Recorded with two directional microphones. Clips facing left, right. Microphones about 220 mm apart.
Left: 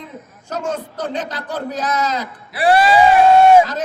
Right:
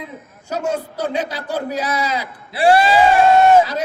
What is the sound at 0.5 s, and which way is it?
A man's voice, 10° right (ahead or behind).